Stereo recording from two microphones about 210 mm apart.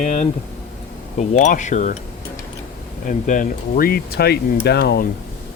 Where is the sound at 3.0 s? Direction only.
40° left (ahead or behind).